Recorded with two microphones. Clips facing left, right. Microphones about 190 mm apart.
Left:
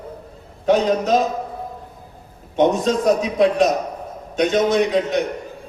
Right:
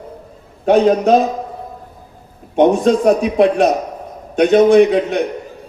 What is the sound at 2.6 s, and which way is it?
A man's voice, 65° right (ahead or behind).